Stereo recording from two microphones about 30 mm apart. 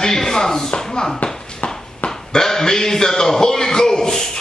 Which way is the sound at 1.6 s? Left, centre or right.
Left.